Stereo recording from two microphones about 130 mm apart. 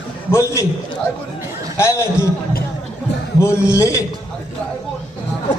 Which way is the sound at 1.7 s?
25° left (ahead or behind).